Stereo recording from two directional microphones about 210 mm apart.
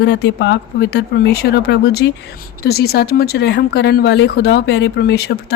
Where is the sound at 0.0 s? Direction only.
55° left (ahead or behind).